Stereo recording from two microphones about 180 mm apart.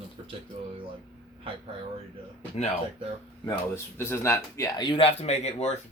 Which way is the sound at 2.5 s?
35° left (ahead or behind).